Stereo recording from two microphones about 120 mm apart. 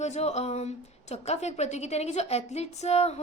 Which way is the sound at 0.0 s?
65° left (ahead or behind).